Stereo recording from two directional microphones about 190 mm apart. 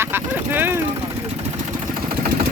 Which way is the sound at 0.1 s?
10° right (ahead or behind).